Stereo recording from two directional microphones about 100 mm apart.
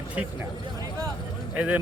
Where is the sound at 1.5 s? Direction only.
10° right (ahead or behind).